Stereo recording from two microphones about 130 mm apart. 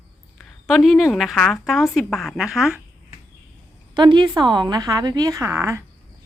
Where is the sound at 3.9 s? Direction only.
35° right (ahead or behind); by 5.8 s 20° right (ahead or behind).